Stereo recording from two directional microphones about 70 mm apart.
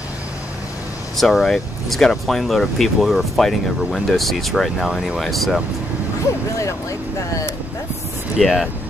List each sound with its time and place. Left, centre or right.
1.1 s speech: centre
6.6 s speech: left
8.4 s speech: centre